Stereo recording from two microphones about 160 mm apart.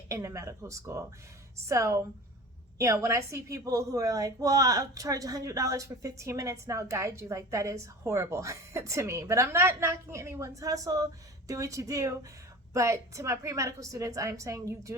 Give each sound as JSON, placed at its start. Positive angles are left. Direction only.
{"t": 0.1, "sound": "a woman's voice", "side_deg": -20}